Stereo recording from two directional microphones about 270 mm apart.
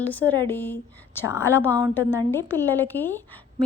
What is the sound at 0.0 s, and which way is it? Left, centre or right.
A woman's voice, centre.